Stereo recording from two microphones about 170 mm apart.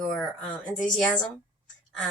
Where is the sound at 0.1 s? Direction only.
Centre (ahead or behind).